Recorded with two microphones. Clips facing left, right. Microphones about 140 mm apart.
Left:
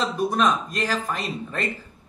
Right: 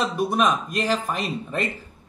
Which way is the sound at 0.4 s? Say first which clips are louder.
Right 1 dB; 20° right (ahead or behind).